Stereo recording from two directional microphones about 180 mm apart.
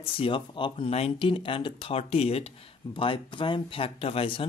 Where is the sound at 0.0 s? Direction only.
30° left (ahead or behind).